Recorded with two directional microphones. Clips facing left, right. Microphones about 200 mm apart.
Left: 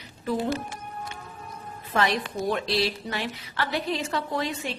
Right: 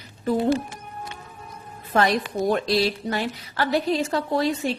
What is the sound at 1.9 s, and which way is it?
Music, 45° right (ahead or behind).